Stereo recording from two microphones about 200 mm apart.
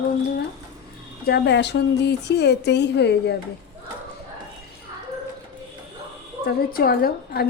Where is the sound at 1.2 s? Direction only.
55° left (ahead or behind).